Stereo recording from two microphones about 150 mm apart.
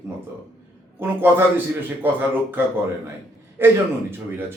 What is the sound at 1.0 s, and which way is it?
A man's voice, 15° right (ahead or behind).